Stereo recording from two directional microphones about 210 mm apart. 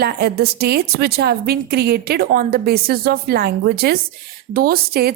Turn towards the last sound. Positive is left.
turn(degrees=-45)  # may be behind; listen again after turning